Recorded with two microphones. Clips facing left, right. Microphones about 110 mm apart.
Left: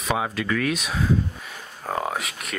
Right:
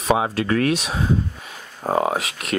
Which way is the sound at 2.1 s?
80° right.